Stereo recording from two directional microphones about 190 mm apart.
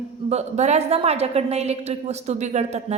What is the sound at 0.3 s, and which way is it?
A woman's voice, 35° right (ahead or behind).